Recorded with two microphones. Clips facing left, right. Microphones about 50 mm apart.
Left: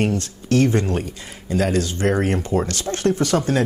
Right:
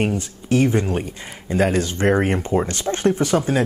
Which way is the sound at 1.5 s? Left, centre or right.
Right.